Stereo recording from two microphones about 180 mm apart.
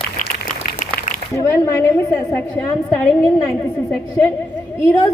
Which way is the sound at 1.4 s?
20° left (ahead or behind).